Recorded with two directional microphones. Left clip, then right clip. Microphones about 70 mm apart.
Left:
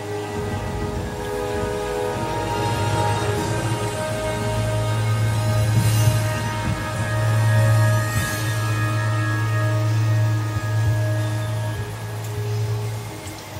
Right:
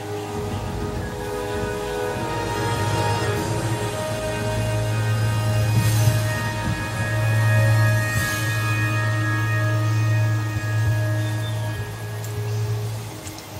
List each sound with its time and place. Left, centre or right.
2.2 s music: centre